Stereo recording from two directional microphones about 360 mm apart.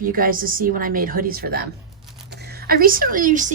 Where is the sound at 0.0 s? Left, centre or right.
Right.